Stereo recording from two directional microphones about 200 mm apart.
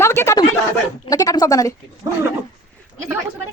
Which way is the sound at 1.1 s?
20° left (ahead or behind).